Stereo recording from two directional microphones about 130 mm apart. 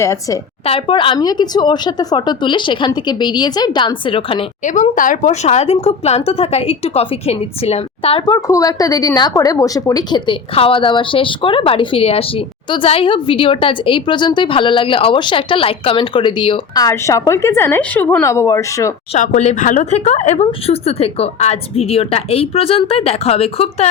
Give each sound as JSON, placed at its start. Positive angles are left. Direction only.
{"t": 0.0, "sound": "a woman's voice", "side_deg": 25}
{"t": 0.6, "sound": "speech", "side_deg": 45}
{"t": 4.6, "sound": "a woman's voice", "side_deg": 75}
{"t": 8.3, "sound": "a woman's voice", "side_deg": 25}
{"t": 10.5, "sound": "speech", "side_deg": 45}
{"t": 16.7, "sound": "a woman's voice", "side_deg": 25}
{"t": 18.2, "sound": "a woman's voice", "side_deg": 25}
{"t": 19.1, "sound": "speech", "side_deg": 65}